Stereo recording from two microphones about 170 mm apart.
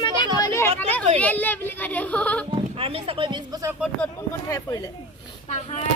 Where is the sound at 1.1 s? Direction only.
10° left (ahead or behind).